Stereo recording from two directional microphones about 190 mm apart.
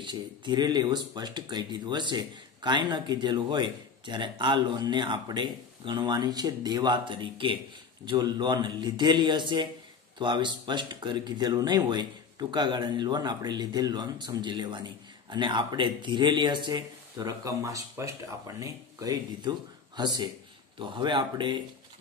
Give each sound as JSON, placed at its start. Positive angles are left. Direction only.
{"t": 0.0, "sound": "speech", "side_deg": -25}